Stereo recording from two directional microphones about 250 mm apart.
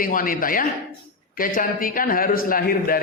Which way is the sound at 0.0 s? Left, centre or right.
Left.